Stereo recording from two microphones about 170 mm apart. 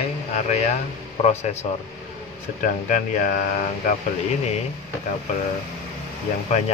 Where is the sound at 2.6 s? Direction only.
50° left (ahead or behind).